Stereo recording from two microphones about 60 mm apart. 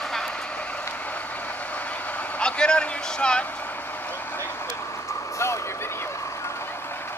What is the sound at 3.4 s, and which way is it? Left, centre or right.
Vehicle, left.